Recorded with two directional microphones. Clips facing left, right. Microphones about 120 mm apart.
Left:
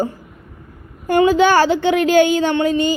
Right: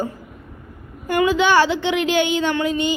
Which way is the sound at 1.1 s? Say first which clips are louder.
Left 3 dB; 40° left (ahead or behind).